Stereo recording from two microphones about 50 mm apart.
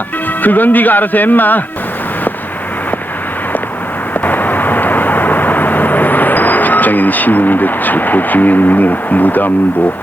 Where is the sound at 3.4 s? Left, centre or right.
Left.